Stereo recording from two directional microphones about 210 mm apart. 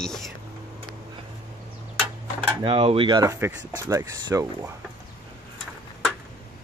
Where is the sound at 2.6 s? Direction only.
25° right (ahead or behind).